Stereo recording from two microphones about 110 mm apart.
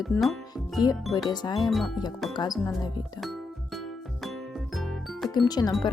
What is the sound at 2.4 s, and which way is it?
Speech, 35° left (ahead or behind).